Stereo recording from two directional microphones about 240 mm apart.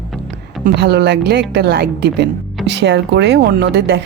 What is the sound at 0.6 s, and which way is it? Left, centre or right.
Speech, right.